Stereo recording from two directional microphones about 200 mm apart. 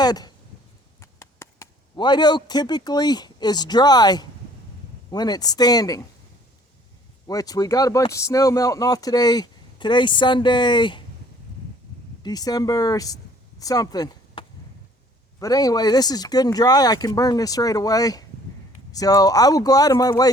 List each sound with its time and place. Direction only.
0.0 s a sound: 20° left (ahead or behind)
1.2 s speech: 15° left (ahead or behind)
7.3 s speech: 20° left (ahead or behind)
12.2 s speech: 20° left (ahead or behind)